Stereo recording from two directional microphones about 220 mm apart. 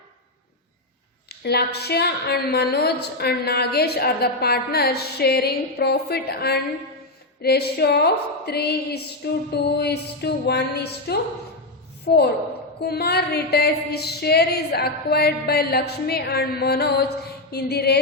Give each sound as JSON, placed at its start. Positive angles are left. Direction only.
{"t": 1.3, "sound": "a woman's voice", "side_deg": 45}